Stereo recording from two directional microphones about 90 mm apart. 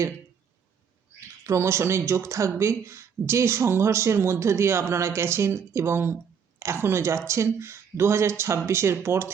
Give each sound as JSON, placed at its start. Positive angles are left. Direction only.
{"t": 1.5, "sound": "speech", "side_deg": -30}